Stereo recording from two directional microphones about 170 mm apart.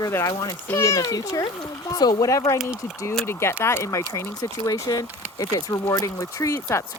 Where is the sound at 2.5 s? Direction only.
Centre (ahead or behind).